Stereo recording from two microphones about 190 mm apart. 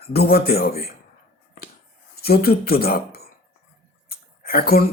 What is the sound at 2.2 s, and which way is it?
Speech, 55° left (ahead or behind).